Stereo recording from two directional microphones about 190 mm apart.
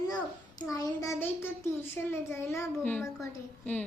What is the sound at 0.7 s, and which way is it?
A child's voice, 15° left (ahead or behind).